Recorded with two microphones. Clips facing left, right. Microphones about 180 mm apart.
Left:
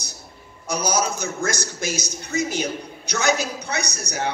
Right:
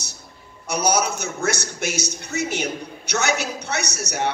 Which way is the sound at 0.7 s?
60° right (ahead or behind).